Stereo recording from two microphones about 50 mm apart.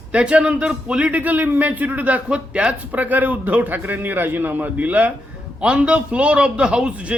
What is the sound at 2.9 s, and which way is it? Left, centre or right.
A man's voice, right.